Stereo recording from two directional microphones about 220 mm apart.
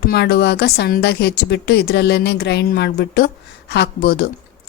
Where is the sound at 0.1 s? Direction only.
45° left (ahead or behind).